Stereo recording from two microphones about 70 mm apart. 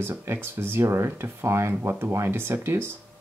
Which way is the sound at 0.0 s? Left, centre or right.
Right.